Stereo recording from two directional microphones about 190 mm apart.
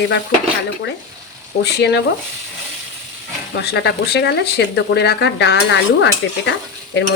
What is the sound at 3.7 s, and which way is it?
Speech, 65° left (ahead or behind).